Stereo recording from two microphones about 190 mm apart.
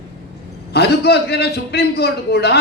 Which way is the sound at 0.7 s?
60° left (ahead or behind).